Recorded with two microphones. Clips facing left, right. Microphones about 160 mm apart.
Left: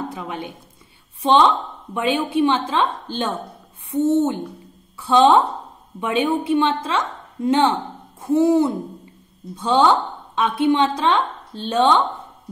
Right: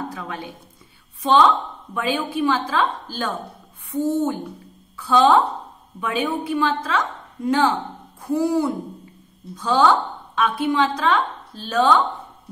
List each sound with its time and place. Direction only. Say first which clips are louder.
0.1 s a woman's voice: left 2 dB; 20° left (ahead or behind)